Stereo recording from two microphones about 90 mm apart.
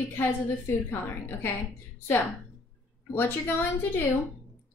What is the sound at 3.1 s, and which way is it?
Speech, 25° left (ahead or behind).